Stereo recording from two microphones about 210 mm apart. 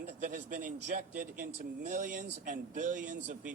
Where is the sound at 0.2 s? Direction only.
35° right (ahead or behind).